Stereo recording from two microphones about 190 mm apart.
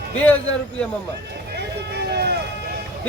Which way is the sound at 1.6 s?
60° right (ahead or behind).